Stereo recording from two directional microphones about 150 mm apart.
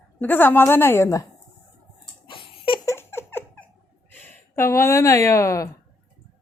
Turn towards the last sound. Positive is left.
turn(degrees=20)  # may be behind; listen again after turning